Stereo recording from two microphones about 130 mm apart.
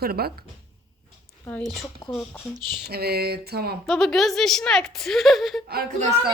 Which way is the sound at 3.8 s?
Centre (ahead or behind).